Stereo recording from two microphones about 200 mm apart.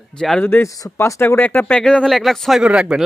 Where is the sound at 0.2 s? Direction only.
5° left (ahead or behind).